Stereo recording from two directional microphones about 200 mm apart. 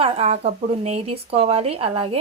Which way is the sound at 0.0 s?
30° right (ahead or behind).